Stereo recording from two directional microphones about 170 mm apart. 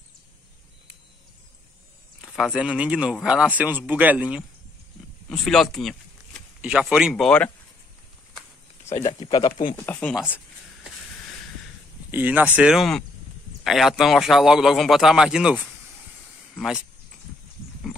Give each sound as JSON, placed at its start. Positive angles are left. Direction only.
{"t": 2.2, "sound": "a man's voice", "side_deg": -5}
{"t": 9.0, "sound": "speech", "side_deg": 30}
{"t": 9.8, "sound": "speech", "side_deg": 10}
{"t": 12.1, "sound": "a man's voice", "side_deg": -10}